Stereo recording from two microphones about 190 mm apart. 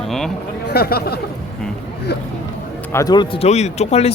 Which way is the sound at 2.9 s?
20° left (ahead or behind).